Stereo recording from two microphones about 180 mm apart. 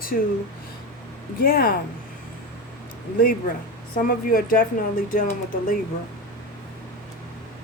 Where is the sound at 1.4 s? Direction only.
55° left (ahead or behind).